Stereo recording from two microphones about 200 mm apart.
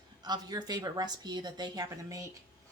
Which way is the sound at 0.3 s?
20° right (ahead or behind).